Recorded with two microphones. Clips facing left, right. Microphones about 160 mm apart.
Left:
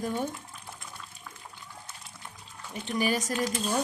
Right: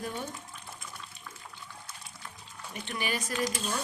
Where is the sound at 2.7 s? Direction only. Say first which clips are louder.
Left 6 dB; 40° left (ahead or behind).